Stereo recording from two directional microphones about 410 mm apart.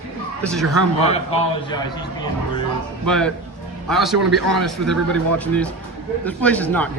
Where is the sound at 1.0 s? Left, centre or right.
Centre.